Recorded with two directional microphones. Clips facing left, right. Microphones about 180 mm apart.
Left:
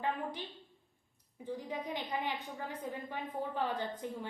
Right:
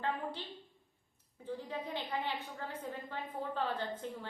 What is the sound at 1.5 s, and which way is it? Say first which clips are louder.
A woman's voice: left 1 dB; 15° left (ahead or behind).